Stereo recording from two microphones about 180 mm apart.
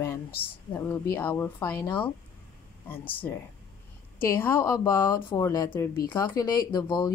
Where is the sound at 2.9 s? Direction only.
10° left (ahead or behind).